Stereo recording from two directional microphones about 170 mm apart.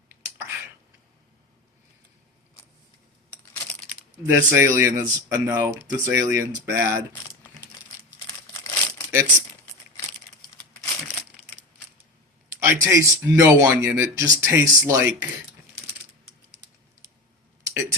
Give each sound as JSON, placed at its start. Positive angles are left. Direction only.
{"t": 0.1, "sound": "a sound", "side_deg": -15}
{"t": 3.3, "sound": "computer keyboard", "side_deg": 5}
{"t": 4.3, "sound": "speech", "side_deg": -15}
{"t": 8.6, "sound": "crumpling", "side_deg": 15}
{"t": 12.5, "sound": "speech", "side_deg": -15}
{"t": 17.6, "sound": "a sound", "side_deg": -20}